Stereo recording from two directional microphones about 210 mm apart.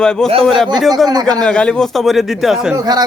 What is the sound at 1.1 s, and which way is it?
Speech, 20° right (ahead or behind).